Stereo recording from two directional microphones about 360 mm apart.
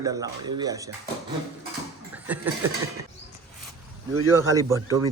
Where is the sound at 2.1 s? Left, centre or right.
Centre.